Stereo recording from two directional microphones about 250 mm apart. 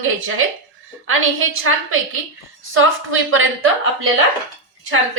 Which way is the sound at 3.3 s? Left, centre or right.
Right.